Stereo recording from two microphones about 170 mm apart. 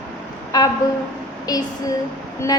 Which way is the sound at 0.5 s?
25° left (ahead or behind).